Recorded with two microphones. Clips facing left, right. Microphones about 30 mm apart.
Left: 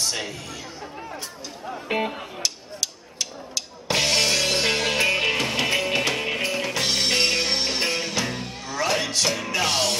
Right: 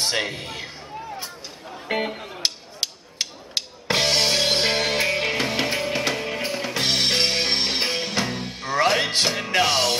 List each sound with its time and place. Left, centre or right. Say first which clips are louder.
0.0 s speech: right 4 dB; right
1.9 s speech: even; centre
2.4 s a sound: right 3 dB; right
3.9 s music: right 1 dB; centre
5.0 s music: left 1 dB; centre
5.4 s music: left 1 dB; centre
6.1 s music: left 1 dB; centre
6.4 s music: left 1 dB; centre
6.8 s music: right 2 dB; right
9.7 s music: right 2 dB; centre